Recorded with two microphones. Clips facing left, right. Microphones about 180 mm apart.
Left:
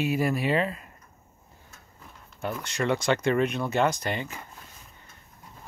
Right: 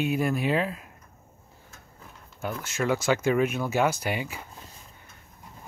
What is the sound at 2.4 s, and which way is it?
Speech, 5° right (ahead or behind).